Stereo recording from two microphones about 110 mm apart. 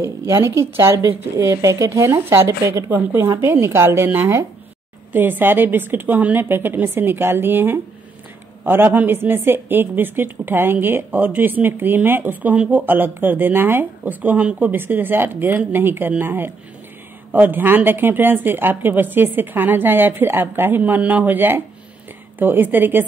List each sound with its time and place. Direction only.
0.0 s a woman's voice: 25° right (ahead or behind)